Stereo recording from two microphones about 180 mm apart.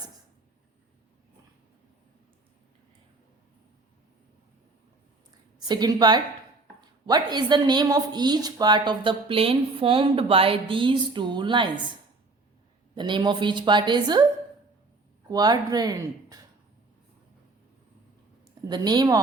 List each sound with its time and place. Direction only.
5.5 s a woman's voice: 25° right (ahead or behind)
12.9 s speech: 25° right (ahead or behind)
15.3 s speech: 20° right (ahead or behind)
18.7 s speech: 20° right (ahead or behind)